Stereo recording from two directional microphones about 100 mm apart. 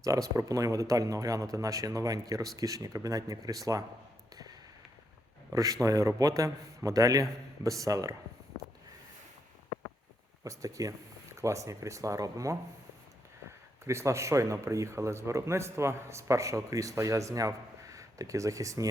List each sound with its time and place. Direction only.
0.0 s a man's voice: 35° right (ahead or behind)
5.5 s a man's voice: 35° right (ahead or behind)
10.4 s a man's voice: 35° right (ahead or behind)
13.8 s a man's voice: 30° right (ahead or behind)